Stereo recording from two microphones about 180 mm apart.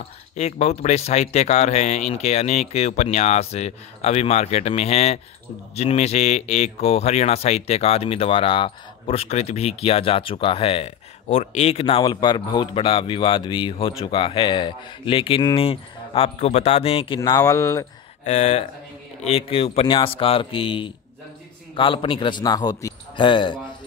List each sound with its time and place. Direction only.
0.4 s speech: 35° left (ahead or behind)
17.2 s speech: 20° left (ahead or behind)
18.2 s speech: 40° left (ahead or behind)